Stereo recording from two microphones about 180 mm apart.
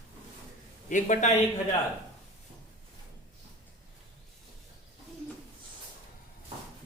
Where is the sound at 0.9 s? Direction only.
45° left (ahead or behind).